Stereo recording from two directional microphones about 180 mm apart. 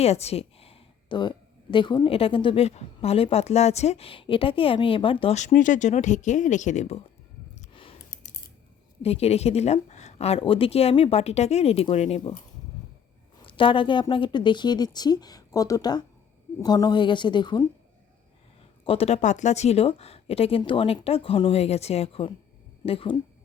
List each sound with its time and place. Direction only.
0.0 s a sound: 35° left (ahead or behind)
1.7 s speech: 25° left (ahead or behind)
7.6 s a sound: 30° left (ahead or behind)
9.0 s speech: 35° left (ahead or behind)
13.4 s a woman's voice: 30° left (ahead or behind)
18.9 s speech: 35° left (ahead or behind)